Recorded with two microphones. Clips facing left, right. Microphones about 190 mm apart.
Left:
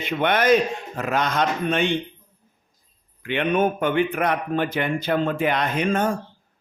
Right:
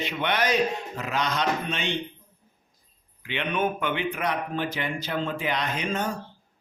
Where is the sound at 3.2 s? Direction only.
50° left (ahead or behind).